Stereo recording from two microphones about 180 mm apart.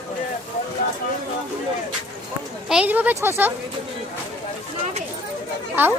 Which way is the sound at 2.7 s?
10° right (ahead or behind).